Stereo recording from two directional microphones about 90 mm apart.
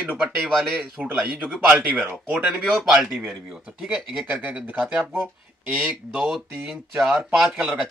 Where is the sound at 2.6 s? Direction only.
Centre (ahead or behind).